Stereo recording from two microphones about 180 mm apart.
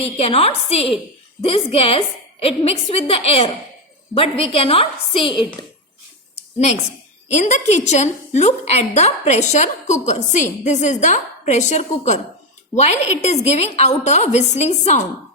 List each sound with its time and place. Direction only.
0.0 s a woman's voice: 35° left (ahead or behind)
7.3 s a woman's voice: 40° left (ahead or behind)